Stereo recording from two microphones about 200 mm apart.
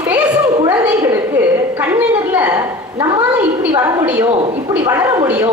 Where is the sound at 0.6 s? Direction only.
20° right (ahead or behind).